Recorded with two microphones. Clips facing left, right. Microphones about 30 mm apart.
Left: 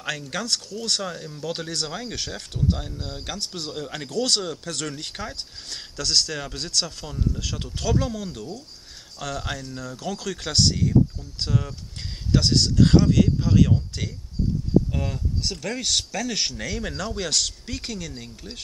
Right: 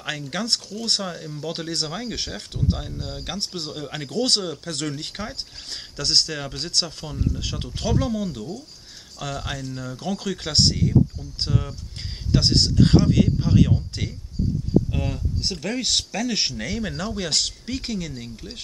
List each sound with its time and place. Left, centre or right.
0.0 s speech: centre
1.0 s speech: centre
4.1 s speech: centre
14.9 s speech: centre
17.3 s speech: centre